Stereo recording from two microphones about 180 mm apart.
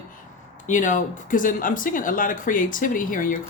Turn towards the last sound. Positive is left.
turn(degrees=50)  # may be behind; listen again after turning